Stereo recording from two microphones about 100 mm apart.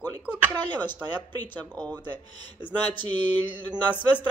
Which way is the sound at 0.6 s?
20° left (ahead or behind).